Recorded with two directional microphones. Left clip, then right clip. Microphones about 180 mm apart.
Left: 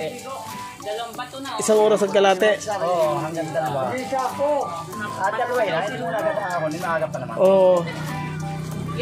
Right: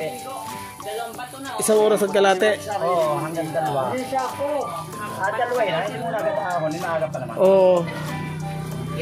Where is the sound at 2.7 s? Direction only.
30° left (ahead or behind).